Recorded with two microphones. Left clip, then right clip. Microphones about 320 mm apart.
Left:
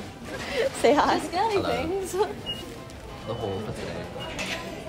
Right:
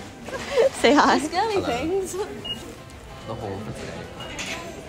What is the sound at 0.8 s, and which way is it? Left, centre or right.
Speech, right.